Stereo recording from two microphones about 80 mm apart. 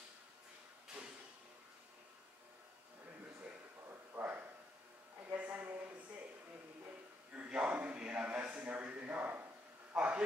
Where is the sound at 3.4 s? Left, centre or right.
Right.